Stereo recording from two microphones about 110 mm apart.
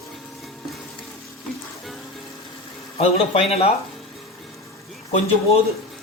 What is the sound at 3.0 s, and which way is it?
Speech, 70° left (ahead or behind).